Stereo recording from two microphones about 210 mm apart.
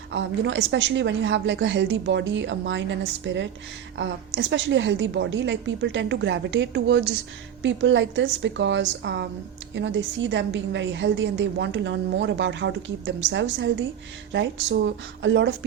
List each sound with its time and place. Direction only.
0.1 s a woman's voice: 60° right (ahead or behind)